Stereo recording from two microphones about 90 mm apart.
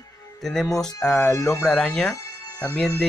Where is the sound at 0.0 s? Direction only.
45° left (ahead or behind).